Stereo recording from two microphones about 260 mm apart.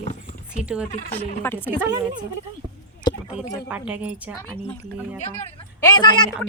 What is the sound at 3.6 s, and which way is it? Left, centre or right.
Speech, centre.